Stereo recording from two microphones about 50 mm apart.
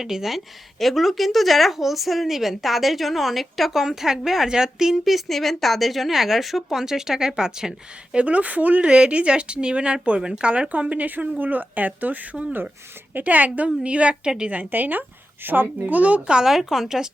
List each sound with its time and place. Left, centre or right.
0.0 s speech: centre
8.1 s a woman's voice: right
14.5 s a woman's voice: right
15.4 s a child's voice: right
15.9 s speech: right
16.3 s speech: centre